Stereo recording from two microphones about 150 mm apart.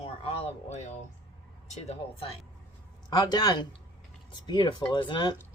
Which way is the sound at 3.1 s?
25° left (ahead or behind).